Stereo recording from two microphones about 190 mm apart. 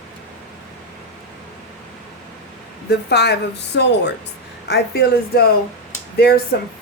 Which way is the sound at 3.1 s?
60° left (ahead or behind).